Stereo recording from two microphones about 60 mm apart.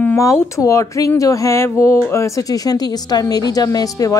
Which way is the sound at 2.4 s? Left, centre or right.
Left.